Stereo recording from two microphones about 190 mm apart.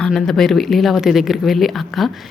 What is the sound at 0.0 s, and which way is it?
Speech, centre (ahead or behind).